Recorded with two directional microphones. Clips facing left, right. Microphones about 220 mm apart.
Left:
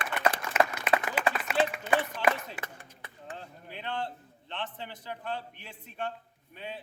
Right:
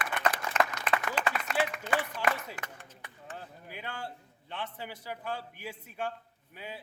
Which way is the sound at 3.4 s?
10° right (ahead or behind).